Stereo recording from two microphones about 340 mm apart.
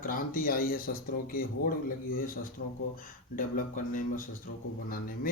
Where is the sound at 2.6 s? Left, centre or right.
Left.